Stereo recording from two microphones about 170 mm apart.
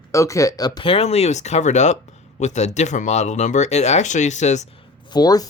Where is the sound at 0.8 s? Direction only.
35° left (ahead or behind).